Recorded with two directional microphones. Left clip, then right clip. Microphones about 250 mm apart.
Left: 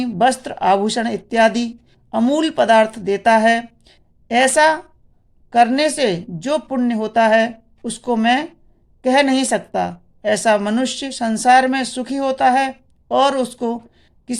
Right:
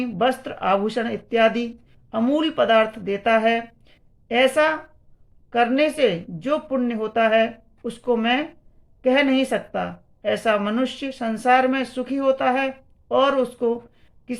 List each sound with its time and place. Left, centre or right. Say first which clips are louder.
0.0 s a woman's voice: left 5 dB; left
3.8 s a sound: left 4 dB; left
5.5 s a woman's voice: left 5 dB; left